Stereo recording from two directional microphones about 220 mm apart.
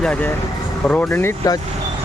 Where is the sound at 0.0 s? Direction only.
5° left (ahead or behind).